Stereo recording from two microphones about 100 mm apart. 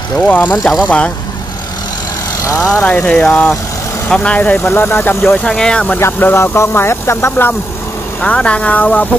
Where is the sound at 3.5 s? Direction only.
30° left (ahead or behind).